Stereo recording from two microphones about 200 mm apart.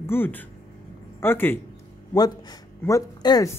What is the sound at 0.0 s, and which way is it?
Speech, 10° left (ahead or behind).